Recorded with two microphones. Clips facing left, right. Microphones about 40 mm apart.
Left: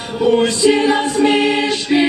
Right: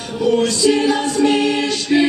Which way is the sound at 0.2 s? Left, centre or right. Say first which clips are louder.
Left 2 dB; left.